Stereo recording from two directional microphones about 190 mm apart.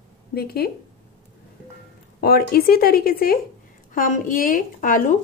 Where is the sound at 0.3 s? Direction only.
55° left (ahead or behind).